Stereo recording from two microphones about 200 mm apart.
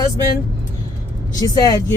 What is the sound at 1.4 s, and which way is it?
Speech, 20° left (ahead or behind).